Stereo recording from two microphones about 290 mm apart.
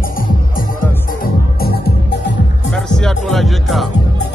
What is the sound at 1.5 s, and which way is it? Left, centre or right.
Music, left.